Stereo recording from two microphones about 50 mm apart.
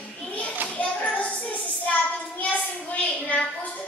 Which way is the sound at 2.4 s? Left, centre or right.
Left.